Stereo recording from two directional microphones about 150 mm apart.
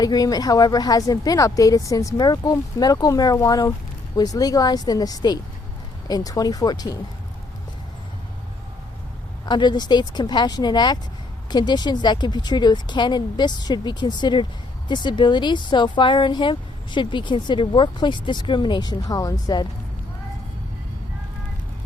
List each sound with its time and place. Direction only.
0.0 s speech: 25° left (ahead or behind)
9.5 s speech: 30° left (ahead or behind)